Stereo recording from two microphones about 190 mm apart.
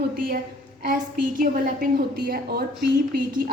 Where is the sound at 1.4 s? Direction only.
45° right (ahead or behind).